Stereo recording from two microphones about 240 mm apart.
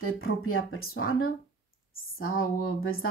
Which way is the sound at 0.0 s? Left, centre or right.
Left.